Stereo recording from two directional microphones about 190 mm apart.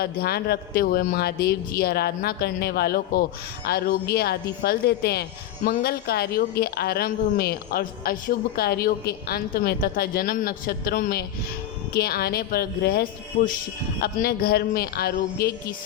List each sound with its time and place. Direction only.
0.0 s a man's voice: 55° left (ahead or behind)